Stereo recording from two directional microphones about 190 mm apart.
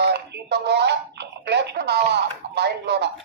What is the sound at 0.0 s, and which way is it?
Telephone, 60° right (ahead or behind).